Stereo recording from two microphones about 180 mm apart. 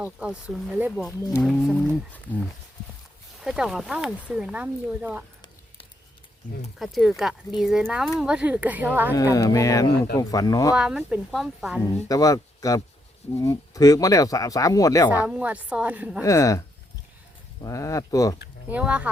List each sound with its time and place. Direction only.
0.0 s speech: 5° right (ahead or behind)
3.4 s speech: 5° right (ahead or behind)
6.7 s speech: centre (ahead or behind)
9.1 s speech: 20° left (ahead or behind)
10.8 s speech: 5° right (ahead or behind)
11.8 s speech: 20° left (ahead or behind)
15.3 s speech: 5° right (ahead or behind)
16.2 s speech: 20° left (ahead or behind)
18.7 s speech: 5° right (ahead or behind)